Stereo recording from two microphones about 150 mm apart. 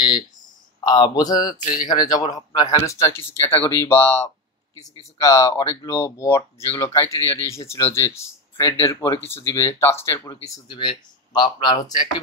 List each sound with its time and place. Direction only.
0.7 s speech: 30° left (ahead or behind)